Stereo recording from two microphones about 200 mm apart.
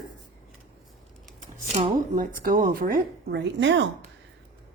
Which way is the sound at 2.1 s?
45° right (ahead or behind).